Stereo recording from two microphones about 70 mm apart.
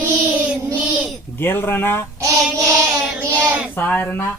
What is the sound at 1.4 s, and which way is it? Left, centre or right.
Speech, left.